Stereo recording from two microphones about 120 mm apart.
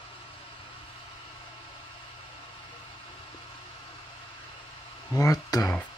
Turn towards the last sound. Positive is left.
turn(degrees=30)  # may be behind; listen again after turning